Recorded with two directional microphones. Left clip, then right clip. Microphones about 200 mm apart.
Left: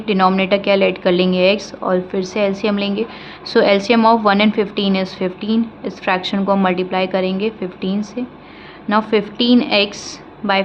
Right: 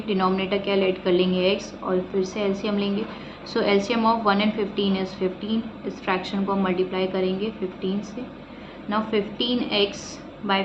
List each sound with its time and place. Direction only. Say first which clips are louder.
0.1 s a woman's voice: left 9 dB; 65° left (ahead or behind)